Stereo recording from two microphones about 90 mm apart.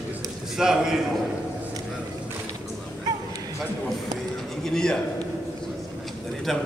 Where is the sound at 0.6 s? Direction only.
5° right (ahead or behind).